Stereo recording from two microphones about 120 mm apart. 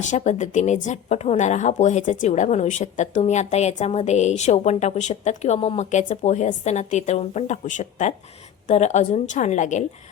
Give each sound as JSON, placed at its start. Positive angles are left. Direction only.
{"t": 0.0, "sound": "a woman's voice", "side_deg": 90}
{"t": 8.6, "sound": "a woman's voice", "side_deg": 75}